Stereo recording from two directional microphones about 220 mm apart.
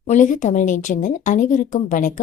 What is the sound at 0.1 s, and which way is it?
Speech, 35° left (ahead or behind).